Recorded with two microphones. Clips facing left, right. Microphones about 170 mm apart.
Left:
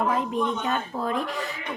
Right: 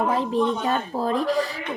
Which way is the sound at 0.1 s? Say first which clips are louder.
Right 3 dB; 35° right (ahead or behind).